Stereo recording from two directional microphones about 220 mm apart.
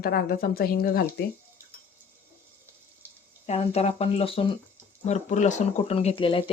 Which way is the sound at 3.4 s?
30° left (ahead or behind).